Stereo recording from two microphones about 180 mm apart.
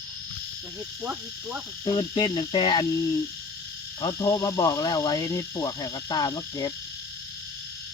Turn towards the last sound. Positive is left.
turn(degrees=20)  # may be behind; listen again after turning